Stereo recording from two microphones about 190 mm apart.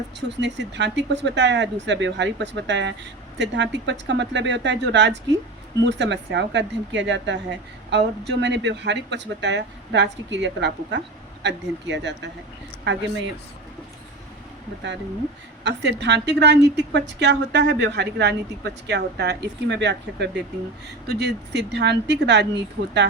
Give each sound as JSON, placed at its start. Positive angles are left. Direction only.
{"t": 0.3, "sound": "a woman's voice", "side_deg": -70}
{"t": 15.6, "sound": "a woman's voice", "side_deg": -65}